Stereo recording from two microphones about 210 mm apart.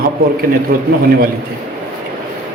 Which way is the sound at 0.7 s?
45° right (ahead or behind).